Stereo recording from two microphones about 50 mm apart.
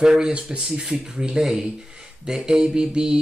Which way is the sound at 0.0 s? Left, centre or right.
Centre.